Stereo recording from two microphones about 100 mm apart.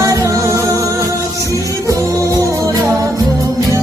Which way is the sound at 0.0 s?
30° right (ahead or behind).